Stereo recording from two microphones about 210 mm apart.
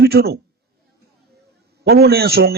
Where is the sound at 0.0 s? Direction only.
50° right (ahead or behind).